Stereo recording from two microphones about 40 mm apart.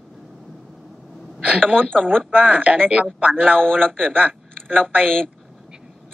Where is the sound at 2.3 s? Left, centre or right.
Right.